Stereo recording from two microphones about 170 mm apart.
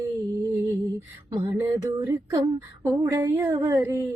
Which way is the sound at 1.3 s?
20° right (ahead or behind).